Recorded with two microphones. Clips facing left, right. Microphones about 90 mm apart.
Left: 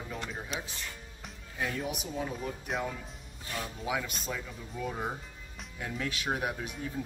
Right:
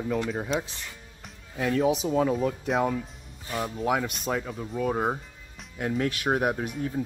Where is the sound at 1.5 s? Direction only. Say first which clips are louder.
Right 11 dB; 85° right.